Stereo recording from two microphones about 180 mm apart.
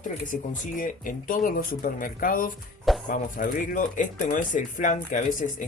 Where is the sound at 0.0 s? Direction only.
45° left (ahead or behind).